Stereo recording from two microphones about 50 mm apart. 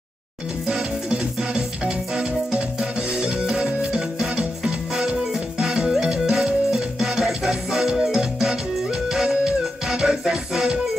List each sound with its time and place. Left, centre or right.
0.7 s music: centre